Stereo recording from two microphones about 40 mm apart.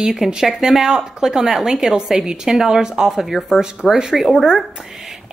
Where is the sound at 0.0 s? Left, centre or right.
Centre.